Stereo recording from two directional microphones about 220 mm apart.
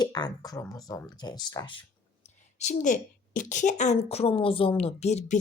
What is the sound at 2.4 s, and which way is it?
A woman's voice, 30° left (ahead or behind).